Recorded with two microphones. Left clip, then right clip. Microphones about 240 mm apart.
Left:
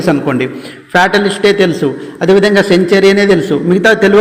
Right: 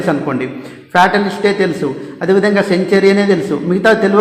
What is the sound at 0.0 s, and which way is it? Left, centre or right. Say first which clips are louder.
A man's voice: left 4 dB; left.